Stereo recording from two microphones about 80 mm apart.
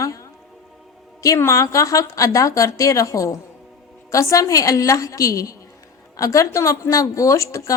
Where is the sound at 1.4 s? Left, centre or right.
Left.